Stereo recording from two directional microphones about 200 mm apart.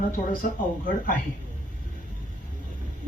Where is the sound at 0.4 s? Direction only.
45° left (ahead or behind).